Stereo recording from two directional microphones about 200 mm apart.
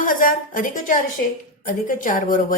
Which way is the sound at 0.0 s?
45° left (ahead or behind).